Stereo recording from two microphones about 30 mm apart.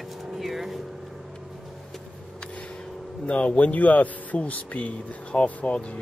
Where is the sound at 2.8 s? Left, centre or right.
Centre.